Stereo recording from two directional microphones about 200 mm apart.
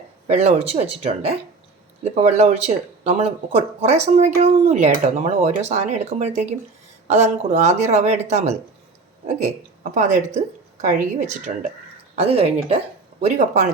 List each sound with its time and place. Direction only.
0.3 s speech: 35° right (ahead or behind)
9.9 s speech: 40° right (ahead or behind)